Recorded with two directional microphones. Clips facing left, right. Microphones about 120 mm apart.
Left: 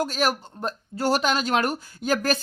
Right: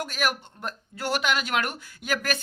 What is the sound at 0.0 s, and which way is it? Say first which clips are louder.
Speech: left 4 dB; 35° left (ahead or behind).